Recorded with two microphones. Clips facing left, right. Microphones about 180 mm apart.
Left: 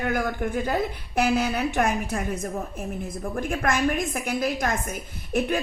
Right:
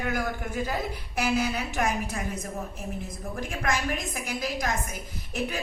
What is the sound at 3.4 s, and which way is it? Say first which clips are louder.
A woman's voice: left 5 dB; 55° left (ahead or behind).